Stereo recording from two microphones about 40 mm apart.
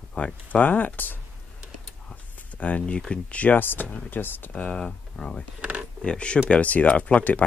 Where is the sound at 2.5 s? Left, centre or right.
Left.